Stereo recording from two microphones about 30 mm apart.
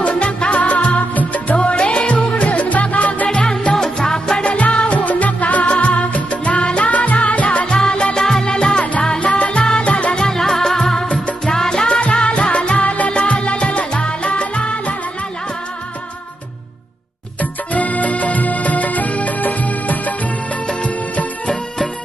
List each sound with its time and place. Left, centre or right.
0.0 s music: left
0.6 s music: left
3.3 s music: left
4.4 s music: left
5.7 s music: left
7.7 s music: left
9.2 s music: left
10.2 s music: left
11.9 s music: left
13.1 s music: left
17.7 s music: left
20.8 s music: left